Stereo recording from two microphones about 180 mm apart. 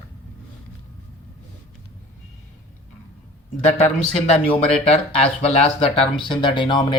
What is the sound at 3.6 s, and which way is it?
Speech, 40° left (ahead or behind).